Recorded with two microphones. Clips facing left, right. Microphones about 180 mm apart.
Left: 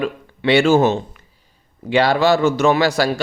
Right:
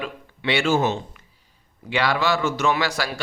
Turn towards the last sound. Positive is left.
turn(degrees=30)  # may be behind; listen again after turning